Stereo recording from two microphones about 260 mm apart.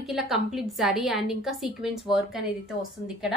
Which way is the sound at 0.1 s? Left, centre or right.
Centre.